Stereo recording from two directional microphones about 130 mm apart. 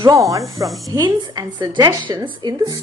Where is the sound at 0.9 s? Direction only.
30° right (ahead or behind).